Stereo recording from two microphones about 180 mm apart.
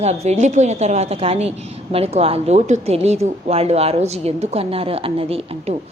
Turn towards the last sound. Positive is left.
turn(degrees=-35)  # may be behind; listen again after turning